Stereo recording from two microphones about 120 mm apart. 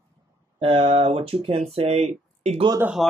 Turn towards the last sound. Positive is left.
turn(degrees=0)  # may be behind; listen again after turning